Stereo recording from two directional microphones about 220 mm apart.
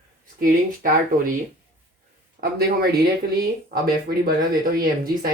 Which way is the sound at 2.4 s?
40° right (ahead or behind).